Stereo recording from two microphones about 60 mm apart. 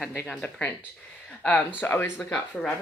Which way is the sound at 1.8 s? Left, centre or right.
Left.